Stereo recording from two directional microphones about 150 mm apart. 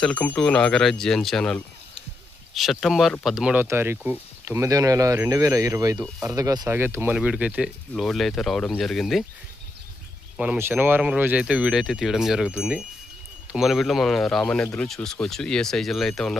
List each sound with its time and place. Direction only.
0.0 s speech: 10° left (ahead or behind)
10.3 s speech: 10° right (ahead or behind)